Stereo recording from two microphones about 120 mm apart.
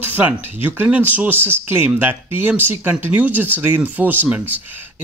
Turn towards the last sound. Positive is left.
turn(degrees=-15)  # may be behind; listen again after turning